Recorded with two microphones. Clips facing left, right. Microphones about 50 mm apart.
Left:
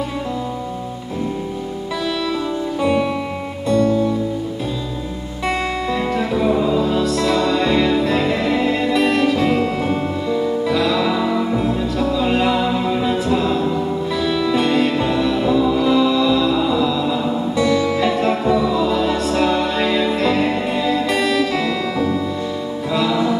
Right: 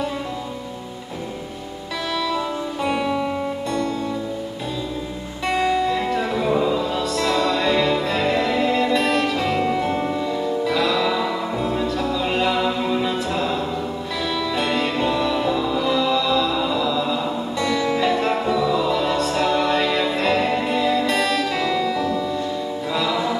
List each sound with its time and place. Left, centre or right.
5.6 s music: centre
9.6 s music: centre
21.9 s music: centre
22.9 s music: centre